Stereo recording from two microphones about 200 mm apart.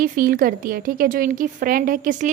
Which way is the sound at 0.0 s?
45° right (ahead or behind).